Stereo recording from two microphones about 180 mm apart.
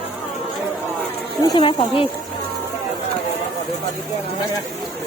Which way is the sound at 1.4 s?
25° left (ahead or behind).